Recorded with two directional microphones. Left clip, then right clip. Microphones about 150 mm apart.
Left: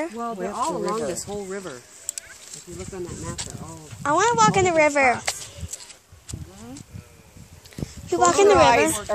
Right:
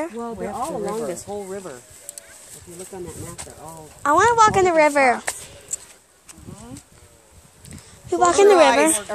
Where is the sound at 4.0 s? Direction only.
10° right (ahead or behind).